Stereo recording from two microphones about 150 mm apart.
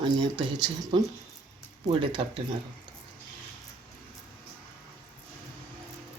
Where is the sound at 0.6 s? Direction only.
30° right (ahead or behind).